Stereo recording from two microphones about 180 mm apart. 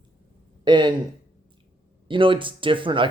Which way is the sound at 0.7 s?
25° right (ahead or behind).